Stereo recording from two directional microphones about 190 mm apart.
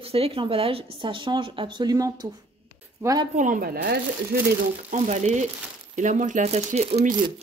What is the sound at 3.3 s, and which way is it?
Speech, 40° right (ahead or behind).